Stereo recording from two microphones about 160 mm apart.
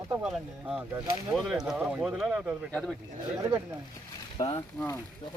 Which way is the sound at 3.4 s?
20° right (ahead or behind).